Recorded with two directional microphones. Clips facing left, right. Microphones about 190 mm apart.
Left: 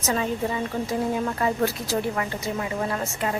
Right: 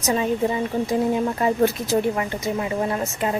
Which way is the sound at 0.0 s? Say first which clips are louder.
Right 4 dB; 20° right (ahead or behind).